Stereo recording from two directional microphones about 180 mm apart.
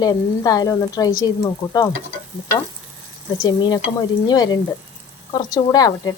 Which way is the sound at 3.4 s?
25° left (ahead or behind).